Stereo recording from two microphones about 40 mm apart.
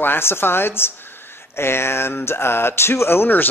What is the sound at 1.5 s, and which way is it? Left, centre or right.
Speech, left.